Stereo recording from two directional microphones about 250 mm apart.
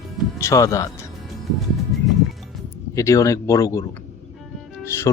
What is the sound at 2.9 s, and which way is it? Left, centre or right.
Speech, centre.